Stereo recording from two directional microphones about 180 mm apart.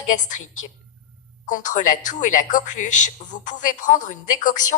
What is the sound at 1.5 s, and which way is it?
A woman's voice, 45° left (ahead or behind).